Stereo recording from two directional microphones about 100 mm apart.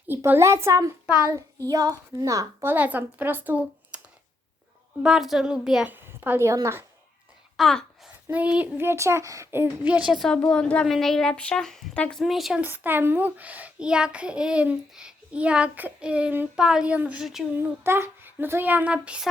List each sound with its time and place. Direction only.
0.1 s a woman's voice: 25° right (ahead or behind)
2.6 s a child's voice: 15° right (ahead or behind)
5.0 s speech: 5° right (ahead or behind)
5.8 s a woman's voice: 20° right (ahead or behind)
7.5 s a sound: 5° left (ahead or behind)
8.3 s speech: 15° right (ahead or behind)
10.1 s a woman's voice: centre (ahead or behind)
12.2 s speech: 5° right (ahead or behind)
12.5 s a child's voice: 20° right (ahead or behind)
17.6 s speech: 25° right (ahead or behind)